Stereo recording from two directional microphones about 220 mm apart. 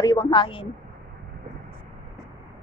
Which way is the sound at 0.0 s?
15° left (ahead or behind).